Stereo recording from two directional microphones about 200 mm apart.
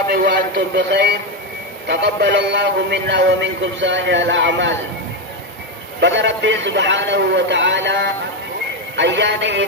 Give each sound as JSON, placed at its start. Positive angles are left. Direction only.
{"t": 0.1, "sound": "a man's voice", "side_deg": -50}
{"t": 6.0, "sound": "a man's voice", "side_deg": -65}